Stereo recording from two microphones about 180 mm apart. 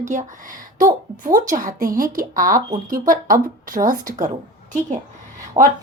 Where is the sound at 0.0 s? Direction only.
45° right (ahead or behind).